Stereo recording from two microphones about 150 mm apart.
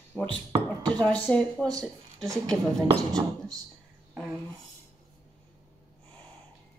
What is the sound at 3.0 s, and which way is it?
Speech, 25° right (ahead or behind).